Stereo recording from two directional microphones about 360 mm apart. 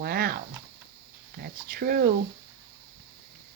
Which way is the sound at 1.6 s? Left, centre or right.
Right.